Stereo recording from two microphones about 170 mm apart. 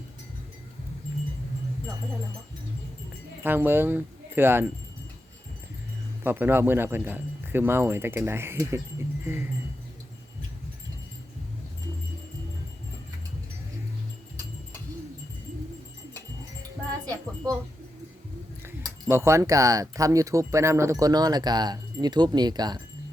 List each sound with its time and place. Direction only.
3.4 s speech: 10° right (ahead or behind)
6.2 s speech: 15° right (ahead or behind)
17.1 s wind chime: 20° right (ahead or behind)
19.0 s speech: 15° right (ahead or behind)